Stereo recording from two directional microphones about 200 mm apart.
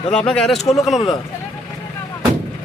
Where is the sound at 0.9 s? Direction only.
25° left (ahead or behind).